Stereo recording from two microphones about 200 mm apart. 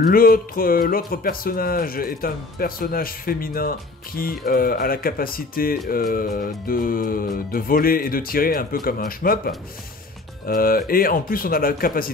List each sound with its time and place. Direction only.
0.0 s speech: 45° left (ahead or behind)